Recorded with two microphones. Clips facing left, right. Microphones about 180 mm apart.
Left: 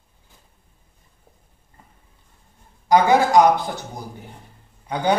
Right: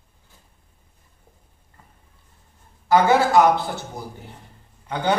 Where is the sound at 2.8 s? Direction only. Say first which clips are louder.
Left 1 dB; 15° left (ahead or behind).